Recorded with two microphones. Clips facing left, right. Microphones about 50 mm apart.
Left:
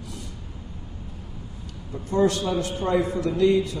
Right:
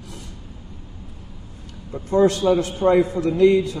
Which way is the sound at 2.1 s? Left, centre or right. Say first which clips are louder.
Right 5 dB; right.